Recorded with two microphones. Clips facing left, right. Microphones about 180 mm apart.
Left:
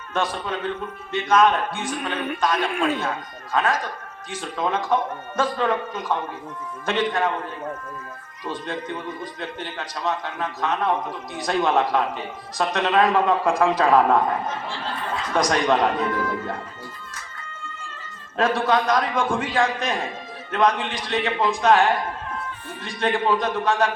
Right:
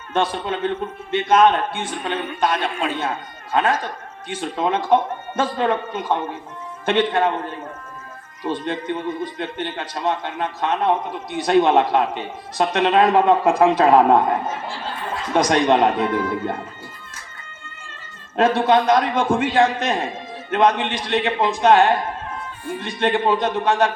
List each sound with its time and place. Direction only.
0.1 s a man's voice: 25° right (ahead or behind)
8.4 s a man's voice: 25° right (ahead or behind)
15.3 s a man's voice: 25° right (ahead or behind)
18.3 s a man's voice: 25° right (ahead or behind)